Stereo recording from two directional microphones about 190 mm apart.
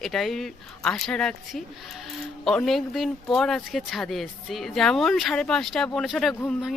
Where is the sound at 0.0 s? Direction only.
Centre (ahead or behind).